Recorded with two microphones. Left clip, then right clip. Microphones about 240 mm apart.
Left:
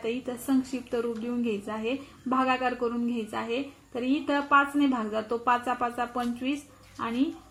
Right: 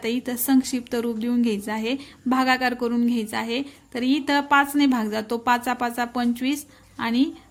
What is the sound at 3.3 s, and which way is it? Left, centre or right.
A woman's voice, right.